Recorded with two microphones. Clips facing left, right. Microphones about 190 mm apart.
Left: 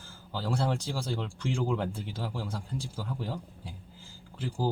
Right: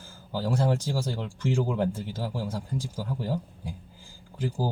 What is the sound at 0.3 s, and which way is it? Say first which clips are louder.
Speech: right 4 dB; 10° right (ahead or behind).